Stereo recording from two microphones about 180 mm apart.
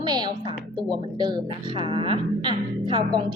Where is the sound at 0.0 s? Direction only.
25° right (ahead or behind).